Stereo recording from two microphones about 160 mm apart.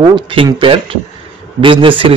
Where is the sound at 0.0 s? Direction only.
30° right (ahead or behind).